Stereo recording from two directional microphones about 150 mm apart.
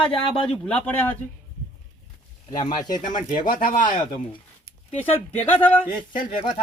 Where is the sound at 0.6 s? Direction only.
10° left (ahead or behind).